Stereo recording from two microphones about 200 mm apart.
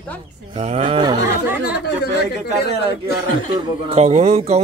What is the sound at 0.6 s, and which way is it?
Speech, 35° right (ahead or behind).